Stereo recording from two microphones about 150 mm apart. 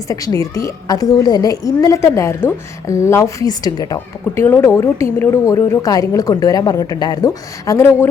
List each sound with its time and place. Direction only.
0.1 s a woman's voice: 25° left (ahead or behind)